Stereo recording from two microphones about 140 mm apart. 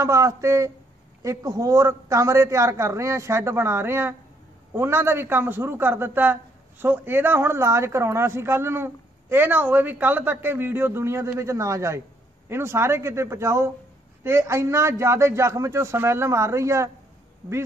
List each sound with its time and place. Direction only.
0.0 s a man's voice: 20° right (ahead or behind)